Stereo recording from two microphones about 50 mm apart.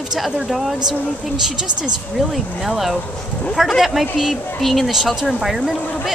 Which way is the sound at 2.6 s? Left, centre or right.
Centre.